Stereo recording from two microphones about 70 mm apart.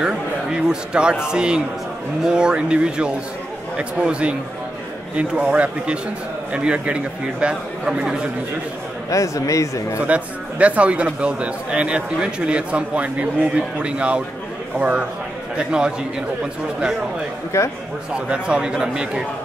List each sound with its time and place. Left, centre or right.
0.0 s a sound: centre
1.2 s a man's voice: centre
9.1 s a man's voice: left
10.0 s a man's voice: centre
17.5 s speech: left
18.1 s a man's voice: centre